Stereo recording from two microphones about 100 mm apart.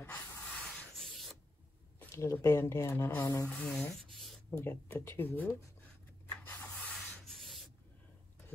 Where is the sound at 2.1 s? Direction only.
25° left (ahead or behind).